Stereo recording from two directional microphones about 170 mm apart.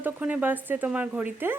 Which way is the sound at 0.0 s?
10° right (ahead or behind).